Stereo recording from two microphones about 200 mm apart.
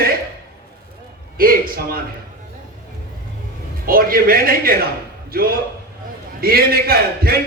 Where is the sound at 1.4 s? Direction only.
45° right (ahead or behind).